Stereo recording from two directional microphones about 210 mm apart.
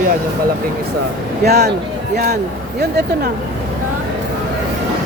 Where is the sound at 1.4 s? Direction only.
50° right (ahead or behind).